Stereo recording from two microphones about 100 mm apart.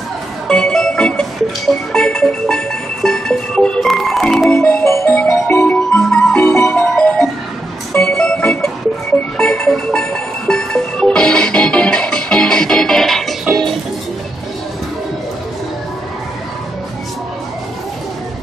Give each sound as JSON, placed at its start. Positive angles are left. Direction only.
{"t": 0.5, "sound": "music", "side_deg": 5}
{"t": 4.5, "sound": "music", "side_deg": 20}
{"t": 5.7, "sound": "music", "side_deg": 10}
{"t": 8.0, "sound": "organ", "side_deg": 10}
{"t": 9.4, "sound": "music", "side_deg": 10}